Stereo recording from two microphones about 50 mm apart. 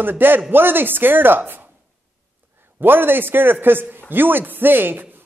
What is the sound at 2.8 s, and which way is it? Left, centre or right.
A man's voice, right.